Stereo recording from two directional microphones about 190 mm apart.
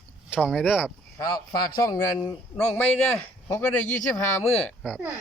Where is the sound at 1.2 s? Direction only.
20° left (ahead or behind).